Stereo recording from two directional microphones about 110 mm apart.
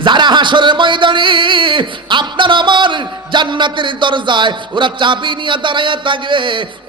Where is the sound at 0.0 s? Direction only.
45° right (ahead or behind).